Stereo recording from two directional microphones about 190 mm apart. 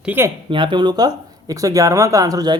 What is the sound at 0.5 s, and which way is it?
Speech, 25° right (ahead or behind).